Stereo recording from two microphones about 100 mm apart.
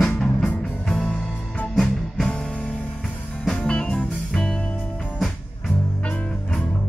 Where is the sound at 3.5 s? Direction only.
10° left (ahead or behind).